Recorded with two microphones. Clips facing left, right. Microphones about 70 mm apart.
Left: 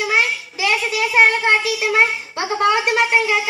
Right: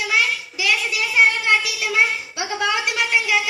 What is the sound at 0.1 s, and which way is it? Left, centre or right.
A child's voice, left.